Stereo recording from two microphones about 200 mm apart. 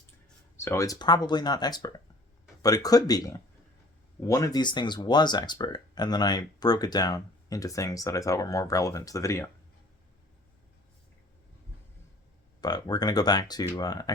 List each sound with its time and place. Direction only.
0.5 s speech: 15° left (ahead or behind)
12.6 s speech: 20° left (ahead or behind)